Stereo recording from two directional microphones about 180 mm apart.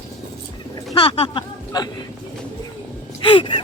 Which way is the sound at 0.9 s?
30° left (ahead or behind).